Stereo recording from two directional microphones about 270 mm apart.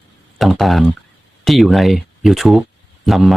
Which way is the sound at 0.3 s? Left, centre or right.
Centre.